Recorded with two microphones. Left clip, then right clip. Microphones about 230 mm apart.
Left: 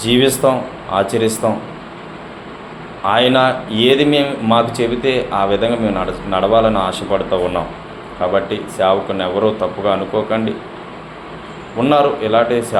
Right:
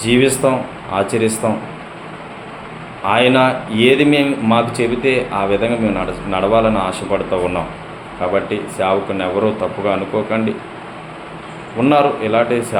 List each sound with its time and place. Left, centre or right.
0.0 s speech: centre
3.1 s speech: centre
11.8 s speech: centre